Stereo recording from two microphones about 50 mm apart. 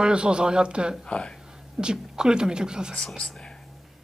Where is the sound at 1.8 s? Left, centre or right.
Centre.